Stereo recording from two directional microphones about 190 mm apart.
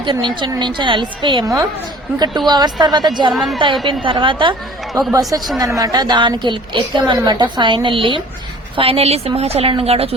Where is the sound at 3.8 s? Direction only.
25° right (ahead or behind).